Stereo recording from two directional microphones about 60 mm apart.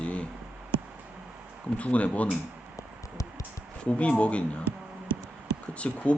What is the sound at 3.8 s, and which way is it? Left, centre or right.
Speech, centre.